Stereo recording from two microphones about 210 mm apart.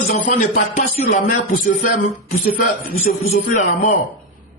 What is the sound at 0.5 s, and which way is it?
Speech, 40° left (ahead or behind).